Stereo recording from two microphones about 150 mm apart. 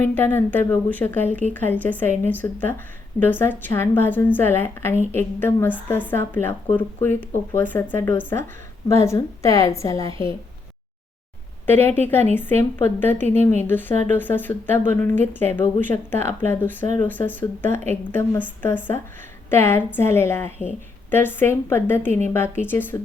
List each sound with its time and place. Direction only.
0.0 s a woman's voice: 15° left (ahead or behind)
11.6 s a woman's voice: 15° left (ahead or behind)
19.5 s a woman's voice: 15° left (ahead or behind)